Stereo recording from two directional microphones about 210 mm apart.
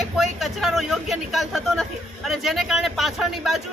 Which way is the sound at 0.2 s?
Centre (ahead or behind).